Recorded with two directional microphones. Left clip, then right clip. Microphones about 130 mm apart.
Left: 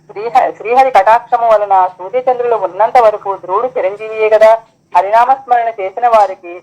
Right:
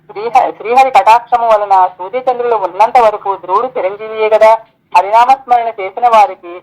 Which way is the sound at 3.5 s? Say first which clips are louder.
Left 1 dB; 35° right (ahead or behind).